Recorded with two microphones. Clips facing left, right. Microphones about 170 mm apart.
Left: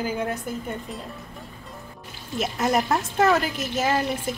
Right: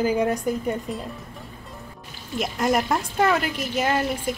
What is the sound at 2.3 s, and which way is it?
A woman's voice, centre (ahead or behind).